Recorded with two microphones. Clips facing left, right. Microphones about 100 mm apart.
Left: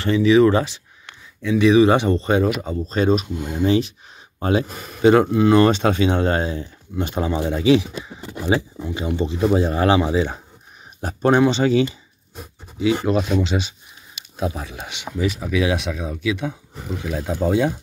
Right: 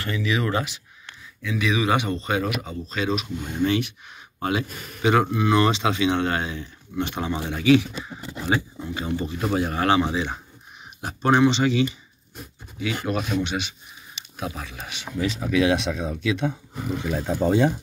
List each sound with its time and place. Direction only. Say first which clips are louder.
0.0 s speech: left 12 dB; 30° left (ahead or behind)
5.7 s speech: left 4 dB; 45° left (ahead or behind); by 17.7 s 5° left (ahead or behind)